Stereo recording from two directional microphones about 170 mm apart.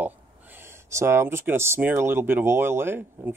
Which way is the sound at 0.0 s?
10° right (ahead or behind).